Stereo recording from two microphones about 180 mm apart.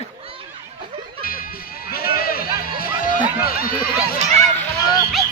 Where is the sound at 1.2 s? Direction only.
55° left (ahead or behind).